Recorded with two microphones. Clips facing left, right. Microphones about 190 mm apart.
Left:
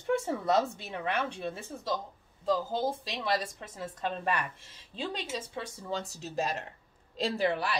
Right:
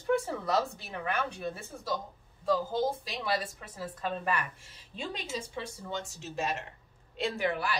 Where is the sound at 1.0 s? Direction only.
30° left (ahead or behind).